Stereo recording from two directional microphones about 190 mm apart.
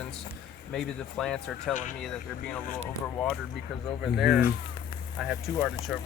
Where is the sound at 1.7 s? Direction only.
40° left (ahead or behind).